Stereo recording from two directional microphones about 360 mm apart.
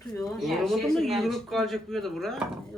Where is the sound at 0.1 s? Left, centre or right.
Centre.